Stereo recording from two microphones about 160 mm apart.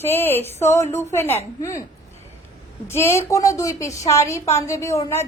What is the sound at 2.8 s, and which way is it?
A woman's voice, 15° left (ahead or behind).